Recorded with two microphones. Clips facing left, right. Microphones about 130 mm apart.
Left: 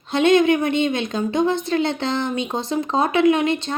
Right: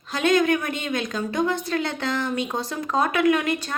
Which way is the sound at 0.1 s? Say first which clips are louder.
Left 5 dB; 25° left (ahead or behind).